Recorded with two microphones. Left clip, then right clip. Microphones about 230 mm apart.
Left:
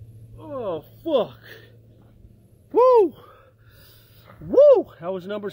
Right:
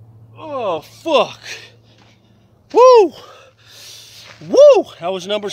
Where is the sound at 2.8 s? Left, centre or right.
Right.